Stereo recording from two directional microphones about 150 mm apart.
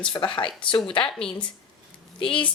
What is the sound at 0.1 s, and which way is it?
Speech, 30° left (ahead or behind).